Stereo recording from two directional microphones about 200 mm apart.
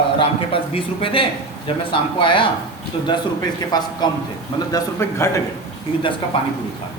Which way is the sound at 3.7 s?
20° left (ahead or behind).